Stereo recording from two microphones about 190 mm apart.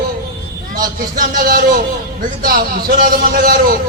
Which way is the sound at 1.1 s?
45° right (ahead or behind).